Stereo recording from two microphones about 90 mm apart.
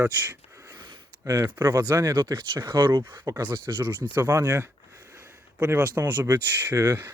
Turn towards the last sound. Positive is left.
turn(degrees=-25)  # may be behind; listen again after turning